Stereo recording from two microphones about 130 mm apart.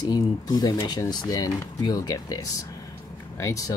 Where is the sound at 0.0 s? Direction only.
30° left (ahead or behind).